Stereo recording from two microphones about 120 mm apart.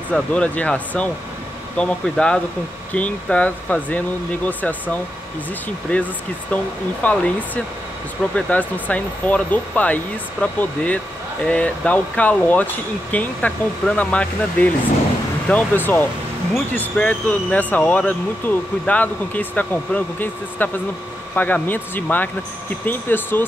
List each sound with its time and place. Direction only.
0.1 s speech: 10° left (ahead or behind)